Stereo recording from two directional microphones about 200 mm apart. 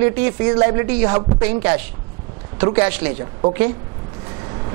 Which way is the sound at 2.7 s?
20° right (ahead or behind).